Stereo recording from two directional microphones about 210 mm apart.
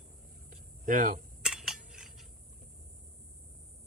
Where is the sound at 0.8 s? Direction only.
40° right (ahead or behind).